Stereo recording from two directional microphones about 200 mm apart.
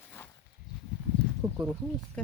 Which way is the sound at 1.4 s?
15° right (ahead or behind).